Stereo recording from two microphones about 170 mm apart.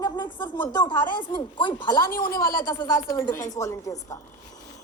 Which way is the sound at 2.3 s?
55° left (ahead or behind).